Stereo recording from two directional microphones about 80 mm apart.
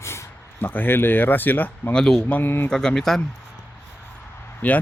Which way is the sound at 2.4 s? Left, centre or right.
Left.